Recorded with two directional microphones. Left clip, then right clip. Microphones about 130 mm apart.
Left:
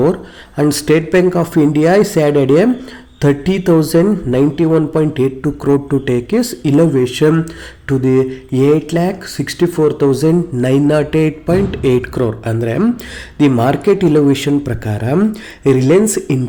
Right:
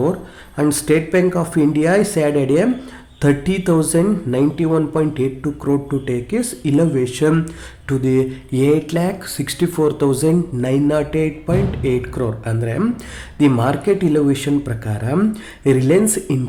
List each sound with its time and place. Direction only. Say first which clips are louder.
0.0 s speech: left 5 dB; 25° left (ahead or behind)
10.6 s speech: left 5 dB; 30° left (ahead or behind)